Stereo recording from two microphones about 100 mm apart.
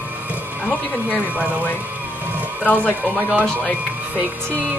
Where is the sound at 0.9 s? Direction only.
15° right (ahead or behind).